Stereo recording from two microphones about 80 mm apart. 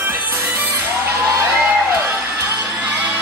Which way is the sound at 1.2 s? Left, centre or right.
Right.